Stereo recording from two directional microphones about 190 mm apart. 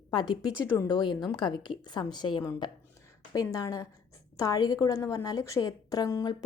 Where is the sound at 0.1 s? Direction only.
20° left (ahead or behind).